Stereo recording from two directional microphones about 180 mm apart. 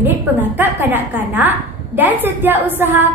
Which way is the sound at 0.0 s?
10° right (ahead or behind).